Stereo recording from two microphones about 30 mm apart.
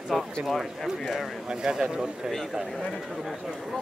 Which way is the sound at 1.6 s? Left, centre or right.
Right.